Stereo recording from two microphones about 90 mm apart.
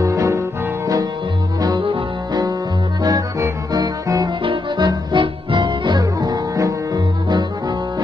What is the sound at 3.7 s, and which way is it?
Music, 45° right (ahead or behind).